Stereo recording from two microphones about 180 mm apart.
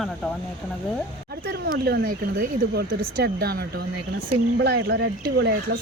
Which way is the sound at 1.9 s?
60° right (ahead or behind).